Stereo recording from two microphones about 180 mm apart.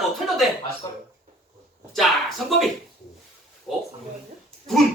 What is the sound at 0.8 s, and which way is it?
Speech, 20° left (ahead or behind).